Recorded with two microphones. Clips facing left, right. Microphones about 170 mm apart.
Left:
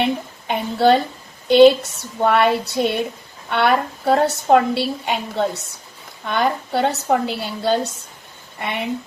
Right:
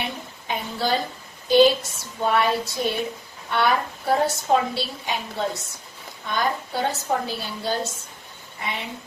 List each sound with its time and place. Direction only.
0.0 s a woman's voice: 65° left (ahead or behind)